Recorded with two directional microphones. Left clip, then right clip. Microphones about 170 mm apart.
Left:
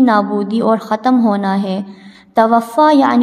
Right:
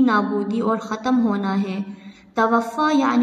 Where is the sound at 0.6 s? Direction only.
40° left (ahead or behind).